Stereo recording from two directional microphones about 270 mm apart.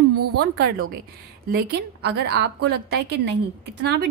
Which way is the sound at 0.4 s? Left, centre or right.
Right.